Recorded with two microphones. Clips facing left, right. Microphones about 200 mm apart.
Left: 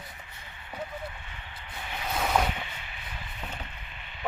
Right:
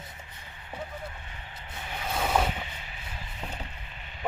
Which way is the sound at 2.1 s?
5° right (ahead or behind).